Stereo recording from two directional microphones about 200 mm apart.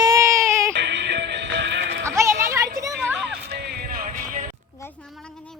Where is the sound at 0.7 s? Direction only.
60° right (ahead or behind).